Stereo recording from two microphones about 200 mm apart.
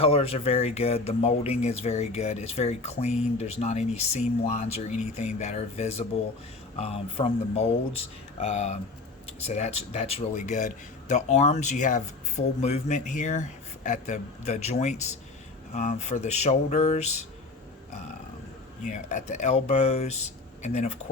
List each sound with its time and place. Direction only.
0.0 s speech: 30° left (ahead or behind)
18.8 s speech: 35° left (ahead or behind)